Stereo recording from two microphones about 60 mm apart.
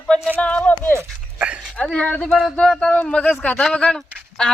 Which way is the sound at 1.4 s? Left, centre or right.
Centre.